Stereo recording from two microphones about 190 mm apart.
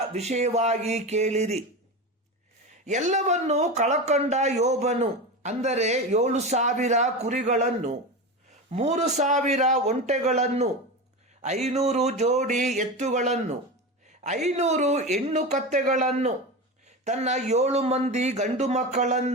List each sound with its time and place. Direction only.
0.1 s speech: 35° right (ahead or behind)
2.8 s speech: 40° right (ahead or behind)